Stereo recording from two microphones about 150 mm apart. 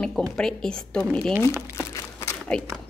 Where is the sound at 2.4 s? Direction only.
5° left (ahead or behind).